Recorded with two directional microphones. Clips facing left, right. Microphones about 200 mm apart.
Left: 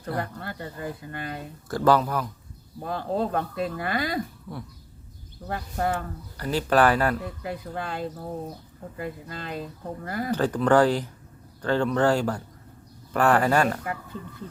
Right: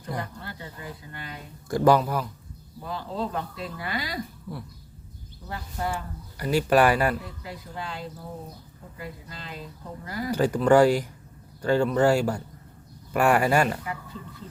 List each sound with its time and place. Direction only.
0.2 s a sound: 55° left (ahead or behind)
1.6 s speech: 15° right (ahead or behind)
2.8 s speech: 55° left (ahead or behind)
5.5 s speech: 55° left (ahead or behind)
6.3 s speech: 10° right (ahead or behind)
7.4 s speech: 55° left (ahead or behind)
10.3 s speech: 10° right (ahead or behind)